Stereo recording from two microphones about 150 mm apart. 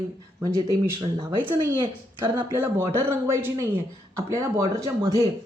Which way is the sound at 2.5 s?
15° right (ahead or behind).